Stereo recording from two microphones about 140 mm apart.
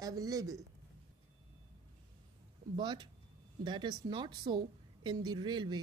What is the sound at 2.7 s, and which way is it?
A woman's voice, 35° right (ahead or behind).